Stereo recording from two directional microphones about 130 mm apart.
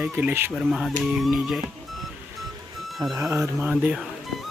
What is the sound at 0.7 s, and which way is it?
Speech, centre (ahead or behind).